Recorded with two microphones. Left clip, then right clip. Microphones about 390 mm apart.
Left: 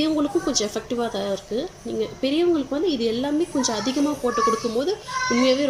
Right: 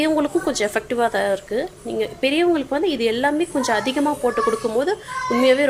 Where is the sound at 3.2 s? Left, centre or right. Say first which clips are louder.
Right 4 dB; right.